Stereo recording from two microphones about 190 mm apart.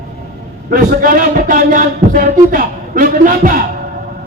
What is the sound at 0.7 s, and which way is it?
A man's voice, 50° right (ahead or behind).